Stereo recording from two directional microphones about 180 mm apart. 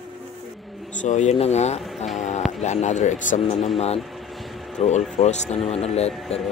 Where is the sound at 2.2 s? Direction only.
40° left (ahead or behind).